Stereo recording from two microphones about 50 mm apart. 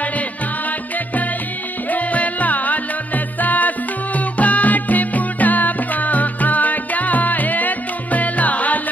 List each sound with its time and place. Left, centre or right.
1.9 s music: left